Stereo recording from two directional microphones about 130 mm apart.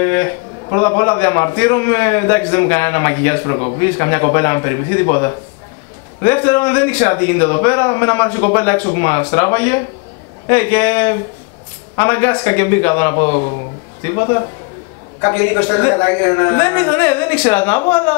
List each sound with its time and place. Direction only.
0.0 s a man's voice: 20° left (ahead or behind)